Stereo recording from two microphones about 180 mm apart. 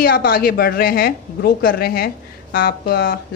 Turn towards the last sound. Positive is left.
turn(degrees=60)  # may be behind; listen again after turning